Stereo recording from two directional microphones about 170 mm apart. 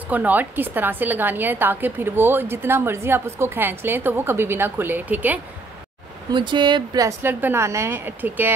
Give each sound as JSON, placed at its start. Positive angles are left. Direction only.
{"t": 0.1, "sound": "a woman's voice", "side_deg": -10}
{"t": 6.3, "sound": "a woman's voice", "side_deg": -25}